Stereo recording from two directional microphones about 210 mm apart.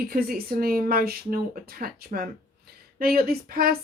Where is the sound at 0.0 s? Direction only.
45° right (ahead or behind).